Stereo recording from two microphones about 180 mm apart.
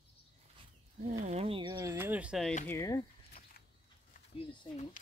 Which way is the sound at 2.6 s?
15° left (ahead or behind).